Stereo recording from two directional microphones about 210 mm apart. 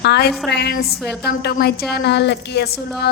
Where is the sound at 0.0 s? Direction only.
50° left (ahead or behind).